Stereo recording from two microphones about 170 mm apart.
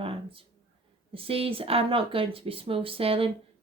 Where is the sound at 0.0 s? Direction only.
30° right (ahead or behind).